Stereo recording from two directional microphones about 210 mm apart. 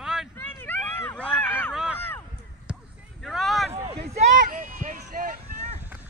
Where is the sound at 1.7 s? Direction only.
5° right (ahead or behind).